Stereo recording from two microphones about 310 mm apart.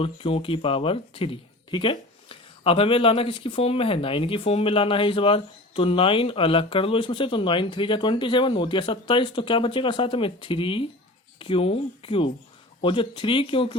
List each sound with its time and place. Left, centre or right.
0.0 s speech: centre